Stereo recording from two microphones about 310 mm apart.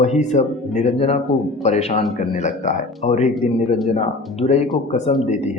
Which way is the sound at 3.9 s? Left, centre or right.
Left.